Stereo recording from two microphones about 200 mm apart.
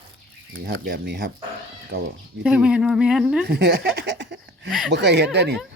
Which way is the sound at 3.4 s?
55° right (ahead or behind).